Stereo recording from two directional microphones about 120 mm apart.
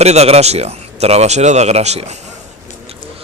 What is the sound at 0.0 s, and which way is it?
Speech, 65° right (ahead or behind).